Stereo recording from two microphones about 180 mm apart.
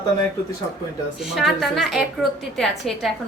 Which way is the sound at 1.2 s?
Centre (ahead or behind).